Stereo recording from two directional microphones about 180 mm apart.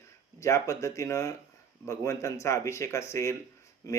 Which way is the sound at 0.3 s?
15° left (ahead or behind).